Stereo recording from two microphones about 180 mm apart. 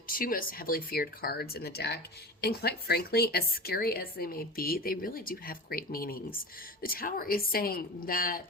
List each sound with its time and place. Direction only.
0.1 s a woman's voice: 50° left (ahead or behind)